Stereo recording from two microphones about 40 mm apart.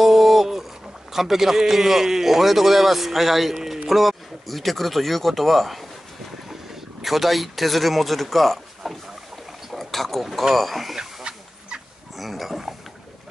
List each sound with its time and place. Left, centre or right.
0.0 s a sound: centre
1.1 s a man's voice: centre
9.7 s boat: centre
10.5 s speech: centre
11.3 s fowl: right
12.2 s pig: centre